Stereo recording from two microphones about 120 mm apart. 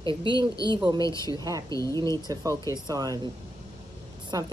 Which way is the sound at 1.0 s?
30° left (ahead or behind).